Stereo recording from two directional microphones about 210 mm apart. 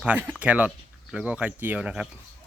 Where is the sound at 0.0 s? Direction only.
10° right (ahead or behind).